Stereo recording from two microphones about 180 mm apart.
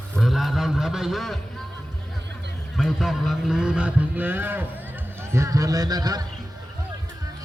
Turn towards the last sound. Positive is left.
turn(degrees=-20)  # may be behind; listen again after turning